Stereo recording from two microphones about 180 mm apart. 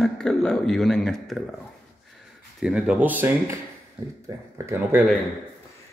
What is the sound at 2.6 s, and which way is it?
Speech, 5° right (ahead or behind).